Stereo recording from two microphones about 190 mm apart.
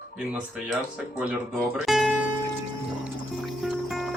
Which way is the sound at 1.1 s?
5° right (ahead or behind).